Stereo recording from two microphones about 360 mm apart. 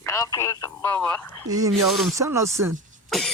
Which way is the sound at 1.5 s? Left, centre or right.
Centre.